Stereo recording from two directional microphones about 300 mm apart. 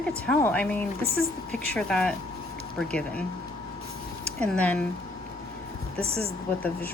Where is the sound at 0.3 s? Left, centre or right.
Centre.